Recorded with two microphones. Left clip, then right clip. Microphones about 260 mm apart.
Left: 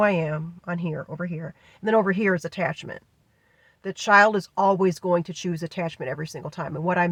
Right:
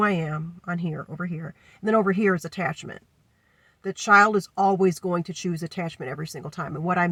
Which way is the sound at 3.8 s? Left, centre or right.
Left.